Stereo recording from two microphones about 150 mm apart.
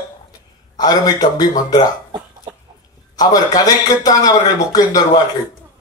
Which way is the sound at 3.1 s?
25° left (ahead or behind).